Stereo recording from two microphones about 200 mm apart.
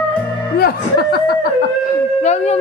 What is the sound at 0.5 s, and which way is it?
Music, 50° left (ahead or behind).